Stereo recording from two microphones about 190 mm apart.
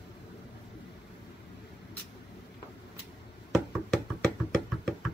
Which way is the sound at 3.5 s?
5° left (ahead or behind).